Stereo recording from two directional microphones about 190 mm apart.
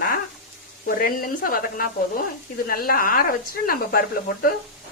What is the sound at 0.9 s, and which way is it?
Speech, 50° left (ahead or behind).